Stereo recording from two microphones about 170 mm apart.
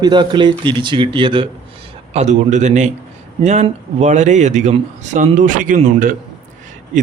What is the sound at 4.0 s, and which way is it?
A man's voice, 45° right (ahead or behind).